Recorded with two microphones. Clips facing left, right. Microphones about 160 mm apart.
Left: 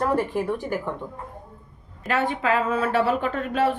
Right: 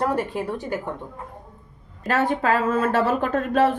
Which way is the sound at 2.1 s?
45° right (ahead or behind).